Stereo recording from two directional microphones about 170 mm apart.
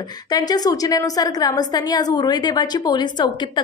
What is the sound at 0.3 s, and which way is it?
A woman's voice, 25° left (ahead or behind).